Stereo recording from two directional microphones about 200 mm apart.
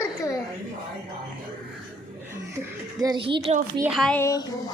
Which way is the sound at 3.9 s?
5° left (ahead or behind).